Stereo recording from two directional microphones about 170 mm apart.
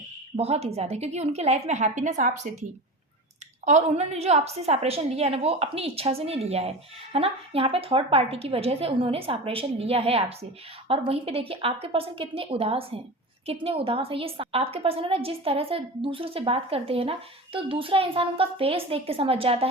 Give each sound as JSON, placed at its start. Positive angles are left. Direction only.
{"t": 0.3, "sound": "a woman's voice", "side_deg": -40}
{"t": 3.7, "sound": "a woman's voice", "side_deg": -40}